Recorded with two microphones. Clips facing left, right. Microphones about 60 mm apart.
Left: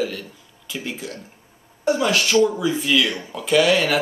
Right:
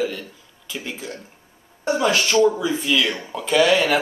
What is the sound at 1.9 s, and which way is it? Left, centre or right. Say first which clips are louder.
Speech: even; centre.